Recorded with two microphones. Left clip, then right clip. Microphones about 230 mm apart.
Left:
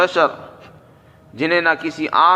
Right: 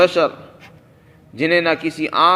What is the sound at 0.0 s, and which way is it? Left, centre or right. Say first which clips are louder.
Speech: right 1 dB; right.